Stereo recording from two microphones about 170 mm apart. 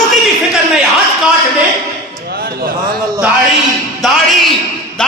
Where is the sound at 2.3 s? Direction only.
70° right (ahead or behind).